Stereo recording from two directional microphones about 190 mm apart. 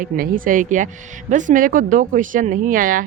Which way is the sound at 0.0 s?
45° right (ahead or behind).